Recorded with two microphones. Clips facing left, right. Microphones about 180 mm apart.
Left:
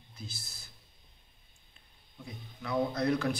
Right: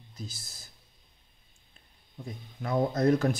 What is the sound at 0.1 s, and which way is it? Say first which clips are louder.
Speech: right 4 dB; 40° right (ahead or behind).